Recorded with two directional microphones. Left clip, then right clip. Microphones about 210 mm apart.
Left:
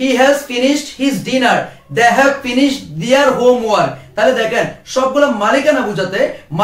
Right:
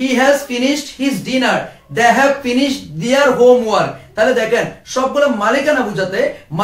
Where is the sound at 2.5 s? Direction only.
5° right (ahead or behind).